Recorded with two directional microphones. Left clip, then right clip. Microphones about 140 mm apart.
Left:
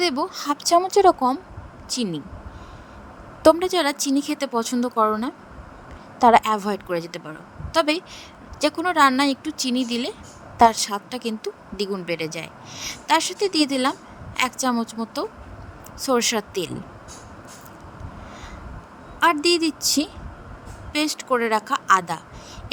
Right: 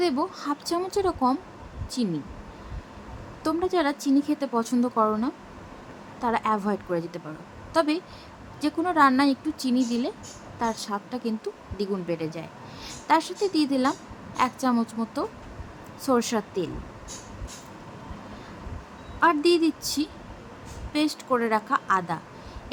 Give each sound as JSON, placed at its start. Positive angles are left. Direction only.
{"t": 0.0, "sound": "a woman's voice", "side_deg": 55}
{"t": 3.4, "sound": "speech", "side_deg": 65}
{"t": 14.7, "sound": "a woman's voice", "side_deg": 45}
{"t": 19.2, "sound": "a woman's voice", "side_deg": 55}